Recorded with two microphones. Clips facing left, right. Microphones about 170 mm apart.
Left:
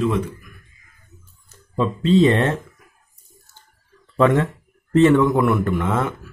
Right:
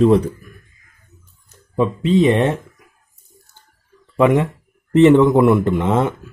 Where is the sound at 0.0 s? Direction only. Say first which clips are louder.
Right 8 dB; 35° right (ahead or behind).